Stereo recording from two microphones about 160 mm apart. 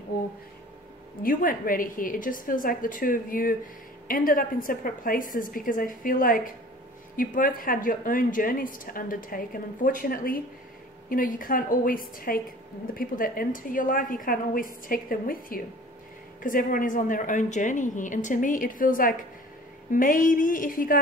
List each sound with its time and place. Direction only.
1.2 s a woman's voice: 60° left (ahead or behind)